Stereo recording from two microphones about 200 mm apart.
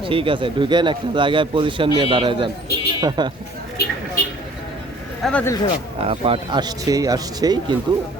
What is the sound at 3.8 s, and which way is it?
Speech, 50° left (ahead or behind).